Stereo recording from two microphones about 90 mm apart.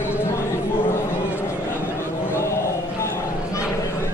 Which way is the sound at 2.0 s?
30° left (ahead or behind).